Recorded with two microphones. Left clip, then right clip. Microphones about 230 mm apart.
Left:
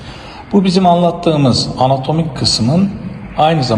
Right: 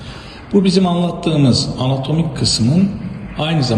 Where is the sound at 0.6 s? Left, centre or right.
Centre.